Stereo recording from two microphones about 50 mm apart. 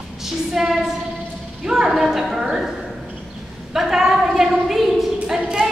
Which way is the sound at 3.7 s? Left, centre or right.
Centre.